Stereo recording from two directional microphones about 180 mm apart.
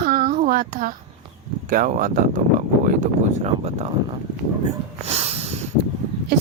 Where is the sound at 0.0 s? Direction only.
50° right (ahead or behind).